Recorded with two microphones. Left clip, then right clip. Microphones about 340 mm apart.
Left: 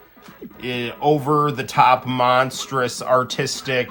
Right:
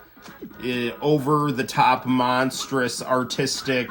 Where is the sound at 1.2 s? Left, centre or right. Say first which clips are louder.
Left 3 dB; left.